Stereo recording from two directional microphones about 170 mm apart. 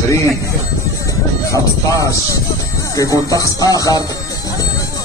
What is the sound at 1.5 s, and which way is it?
Music, 20° left (ahead or behind).